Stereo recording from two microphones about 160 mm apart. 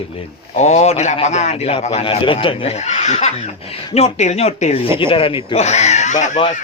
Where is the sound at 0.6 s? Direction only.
45° left (ahead or behind).